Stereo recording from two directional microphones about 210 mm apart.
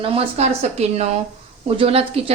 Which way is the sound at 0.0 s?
25° right (ahead or behind).